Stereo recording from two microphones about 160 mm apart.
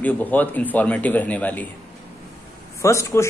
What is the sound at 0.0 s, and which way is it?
Speech, 10° left (ahead or behind).